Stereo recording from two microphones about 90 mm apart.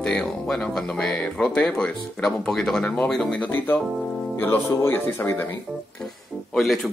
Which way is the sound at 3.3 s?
20° left (ahead or behind).